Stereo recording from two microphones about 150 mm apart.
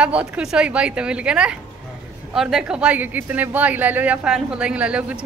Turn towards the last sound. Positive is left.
turn(degrees=-10)  # may be behind; listen again after turning